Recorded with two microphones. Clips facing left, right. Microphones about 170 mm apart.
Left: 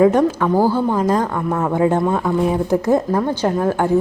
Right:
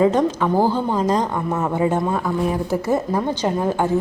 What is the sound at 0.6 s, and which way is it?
Speech, 15° right (ahead or behind).